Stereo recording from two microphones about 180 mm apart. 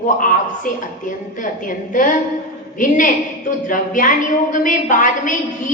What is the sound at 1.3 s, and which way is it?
A woman's voice, 45° left (ahead or behind).